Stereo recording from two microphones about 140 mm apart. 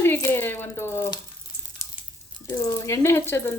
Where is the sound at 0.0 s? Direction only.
15° left (ahead or behind).